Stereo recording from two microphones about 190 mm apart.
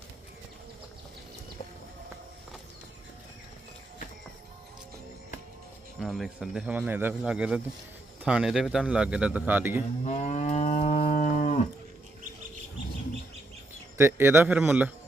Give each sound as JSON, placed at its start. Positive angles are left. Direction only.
{"t": 6.0, "sound": "speech", "side_deg": 0}
{"t": 10.0, "sound": "moo", "side_deg": 40}
{"t": 14.0, "sound": "a man's voice", "side_deg": -10}